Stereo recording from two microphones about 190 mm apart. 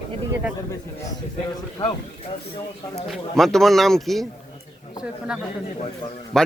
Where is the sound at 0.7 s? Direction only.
20° left (ahead or behind).